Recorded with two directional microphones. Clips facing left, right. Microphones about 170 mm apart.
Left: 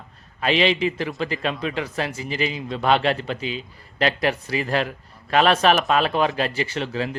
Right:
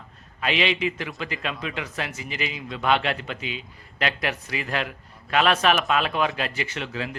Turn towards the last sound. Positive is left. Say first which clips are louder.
# left 5 dB
turn(degrees=35)  # may be behind; listen again after turning